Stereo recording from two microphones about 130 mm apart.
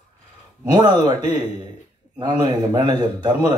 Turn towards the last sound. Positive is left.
turn(degrees=-35)  # may be behind; listen again after turning